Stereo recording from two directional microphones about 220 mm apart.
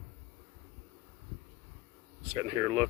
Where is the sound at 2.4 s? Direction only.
20° right (ahead or behind).